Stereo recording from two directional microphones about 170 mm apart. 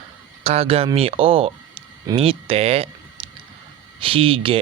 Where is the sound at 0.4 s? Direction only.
35° right (ahead or behind).